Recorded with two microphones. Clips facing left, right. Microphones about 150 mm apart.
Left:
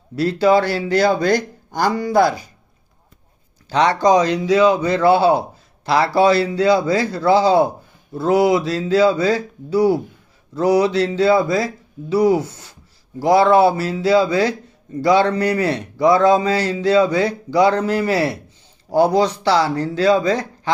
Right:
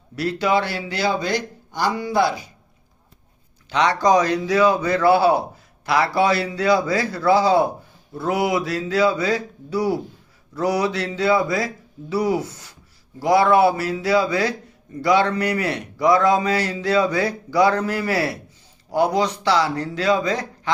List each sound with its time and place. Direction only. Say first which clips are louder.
0.2 s speech: left 6 dB; 30° left (ahead or behind)
3.7 s a man's voice: left 3 dB; 30° left (ahead or behind)